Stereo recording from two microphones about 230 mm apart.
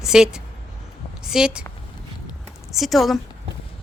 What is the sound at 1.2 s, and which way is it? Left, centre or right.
Speech, centre.